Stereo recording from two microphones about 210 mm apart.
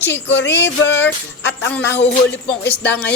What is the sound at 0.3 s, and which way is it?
Speech, 55° left (ahead or behind).